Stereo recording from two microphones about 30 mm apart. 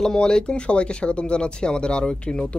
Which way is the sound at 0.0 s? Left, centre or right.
Left.